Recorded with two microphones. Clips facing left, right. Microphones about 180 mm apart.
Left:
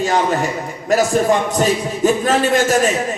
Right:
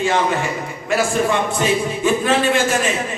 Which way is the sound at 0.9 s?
40° left (ahead or behind).